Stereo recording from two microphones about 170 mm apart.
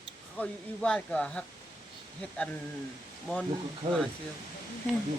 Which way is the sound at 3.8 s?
40° right (ahead or behind).